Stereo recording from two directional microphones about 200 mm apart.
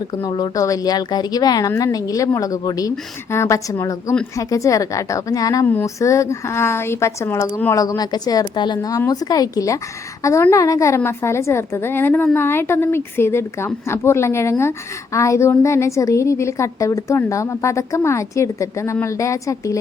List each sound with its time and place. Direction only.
0.1 s a woman's voice: 20° left (ahead or behind)